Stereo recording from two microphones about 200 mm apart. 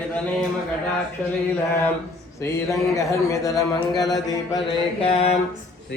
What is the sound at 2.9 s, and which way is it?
Speech, 15° left (ahead or behind).